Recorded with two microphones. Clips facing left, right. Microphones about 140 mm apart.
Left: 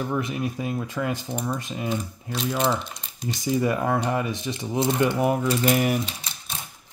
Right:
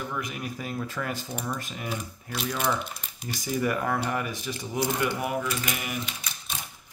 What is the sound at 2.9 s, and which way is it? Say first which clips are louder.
Typing: left 5 dB; 5° right (ahead or behind).